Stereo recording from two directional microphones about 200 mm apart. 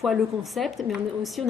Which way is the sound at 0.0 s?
Centre (ahead or behind).